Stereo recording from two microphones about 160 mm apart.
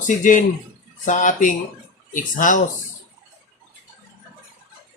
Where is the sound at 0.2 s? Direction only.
55° left (ahead or behind).